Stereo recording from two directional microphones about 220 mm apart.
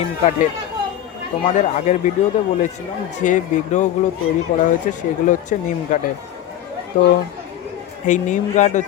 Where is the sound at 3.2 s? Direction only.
35° left (ahead or behind).